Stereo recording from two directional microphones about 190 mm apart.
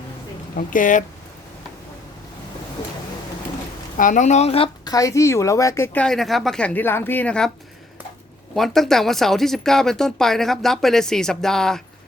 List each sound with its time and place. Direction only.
0.5 s a woman's voice: 45° left (ahead or behind)
3.9 s speech: 45° left (ahead or behind); by 7.5 s 5° left (ahead or behind)
8.5 s speech: centre (ahead or behind)